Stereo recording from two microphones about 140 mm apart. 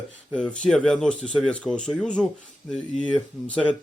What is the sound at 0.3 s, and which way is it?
Speech, 5° left (ahead or behind).